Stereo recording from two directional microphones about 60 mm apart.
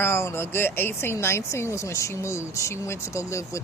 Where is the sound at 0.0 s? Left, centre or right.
Left.